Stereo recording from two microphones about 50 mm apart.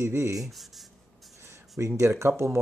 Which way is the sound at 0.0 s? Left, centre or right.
Right.